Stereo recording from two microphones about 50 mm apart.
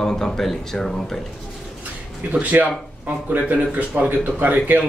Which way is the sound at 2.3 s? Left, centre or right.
Right.